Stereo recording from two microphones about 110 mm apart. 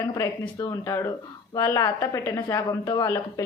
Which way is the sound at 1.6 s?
25° left (ahead or behind).